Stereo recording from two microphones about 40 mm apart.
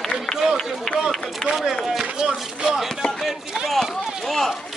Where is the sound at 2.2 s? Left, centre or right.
Centre.